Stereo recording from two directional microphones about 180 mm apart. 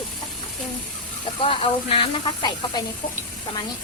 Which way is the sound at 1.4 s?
30° left (ahead or behind).